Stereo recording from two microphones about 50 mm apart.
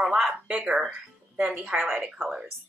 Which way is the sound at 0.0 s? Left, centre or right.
Centre.